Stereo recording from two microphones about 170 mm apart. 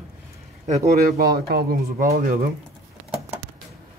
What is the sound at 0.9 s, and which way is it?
Speech, 60° right (ahead or behind).